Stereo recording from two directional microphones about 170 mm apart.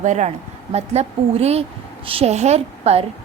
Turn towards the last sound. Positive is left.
turn(degrees=-35)  # may be behind; listen again after turning